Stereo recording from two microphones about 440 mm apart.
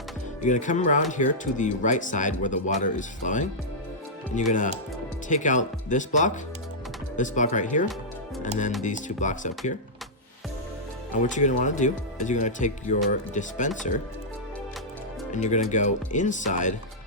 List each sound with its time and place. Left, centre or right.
0.4 s speech: centre
11.1 s speech: centre
15.3 s speech: centre